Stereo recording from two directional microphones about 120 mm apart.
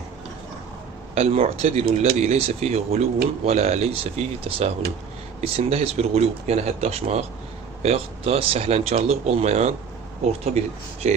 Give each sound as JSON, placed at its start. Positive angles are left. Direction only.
{"t": 1.1, "sound": "speech", "side_deg": -55}
{"t": 11.0, "sound": "speech", "side_deg": -70}